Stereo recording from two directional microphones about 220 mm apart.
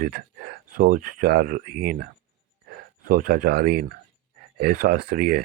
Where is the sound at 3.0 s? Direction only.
40° right (ahead or behind).